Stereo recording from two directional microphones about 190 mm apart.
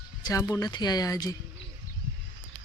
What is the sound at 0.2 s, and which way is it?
Speech, 20° left (ahead or behind).